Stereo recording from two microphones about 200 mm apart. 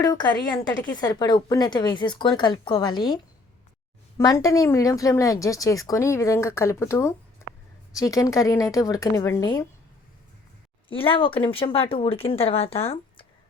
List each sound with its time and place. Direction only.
0.0 s speech: 15° left (ahead or behind)
4.2 s a woman's voice: 15° left (ahead or behind)
7.4 s a sound: 15° left (ahead or behind)
7.9 s a woman's voice: 15° left (ahead or behind)
10.8 s speech: 25° left (ahead or behind)